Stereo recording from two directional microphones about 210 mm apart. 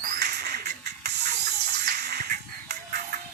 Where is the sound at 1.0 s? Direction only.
55° right (ahead or behind).